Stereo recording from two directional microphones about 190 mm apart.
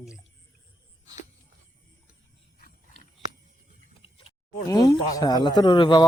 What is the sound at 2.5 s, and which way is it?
Wild animals, 45° left (ahead or behind).